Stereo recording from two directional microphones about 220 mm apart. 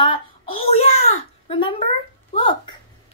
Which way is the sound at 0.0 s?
25° left (ahead or behind).